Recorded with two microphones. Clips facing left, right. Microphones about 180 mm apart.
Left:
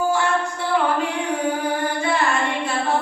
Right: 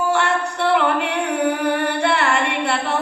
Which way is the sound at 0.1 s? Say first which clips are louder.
Right 1 dB; 70° right (ahead or behind).